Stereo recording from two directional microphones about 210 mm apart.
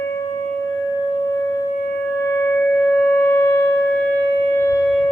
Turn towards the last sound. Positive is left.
turn(degrees=10)  # may be behind; listen again after turning